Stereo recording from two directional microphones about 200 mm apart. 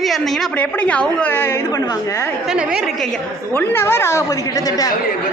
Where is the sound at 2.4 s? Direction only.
5° right (ahead or behind).